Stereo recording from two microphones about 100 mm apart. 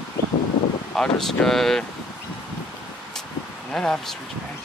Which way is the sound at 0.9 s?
5° left (ahead or behind).